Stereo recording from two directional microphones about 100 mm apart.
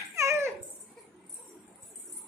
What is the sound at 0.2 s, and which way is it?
Dog, 30° right (ahead or behind).